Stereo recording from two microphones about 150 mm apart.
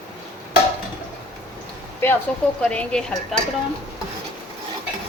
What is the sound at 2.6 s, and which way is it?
Speech, 5° left (ahead or behind).